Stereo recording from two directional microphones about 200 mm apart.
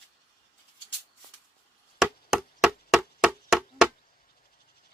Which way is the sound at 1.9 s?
Centre (ahead or behind).